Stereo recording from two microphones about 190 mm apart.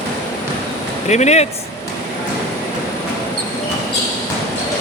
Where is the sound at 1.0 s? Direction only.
35° left (ahead or behind).